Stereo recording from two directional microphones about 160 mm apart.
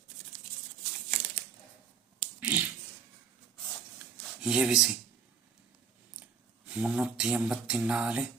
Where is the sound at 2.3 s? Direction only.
10° right (ahead or behind).